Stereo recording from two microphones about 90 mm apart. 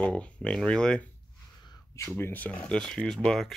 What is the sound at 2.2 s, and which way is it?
Speech, 20° left (ahead or behind).